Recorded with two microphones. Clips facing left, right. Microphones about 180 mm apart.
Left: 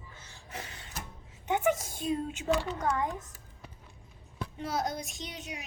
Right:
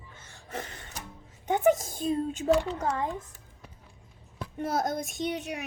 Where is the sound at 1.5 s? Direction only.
35° right (ahead or behind).